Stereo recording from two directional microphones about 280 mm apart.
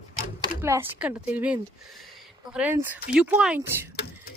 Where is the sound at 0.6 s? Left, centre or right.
Centre.